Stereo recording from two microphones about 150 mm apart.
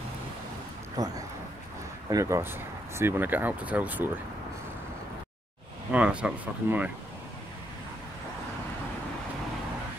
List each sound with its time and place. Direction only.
0.9 s speech: 25° right (ahead or behind)
5.9 s speech: 10° right (ahead or behind)